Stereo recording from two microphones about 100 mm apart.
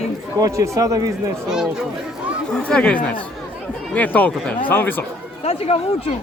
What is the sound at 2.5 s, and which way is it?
Speech, 10° left (ahead or behind).